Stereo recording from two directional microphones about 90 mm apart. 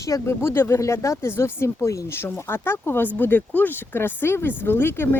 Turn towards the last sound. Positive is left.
turn(degrees=25)  # may be behind; listen again after turning